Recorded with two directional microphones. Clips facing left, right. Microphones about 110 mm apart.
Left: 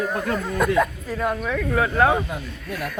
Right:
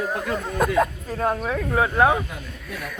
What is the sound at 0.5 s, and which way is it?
Speech, 35° right (ahead or behind).